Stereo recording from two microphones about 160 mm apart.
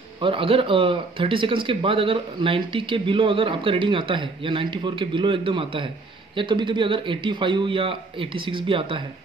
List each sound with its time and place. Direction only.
0.2 s speech: 35° right (ahead or behind)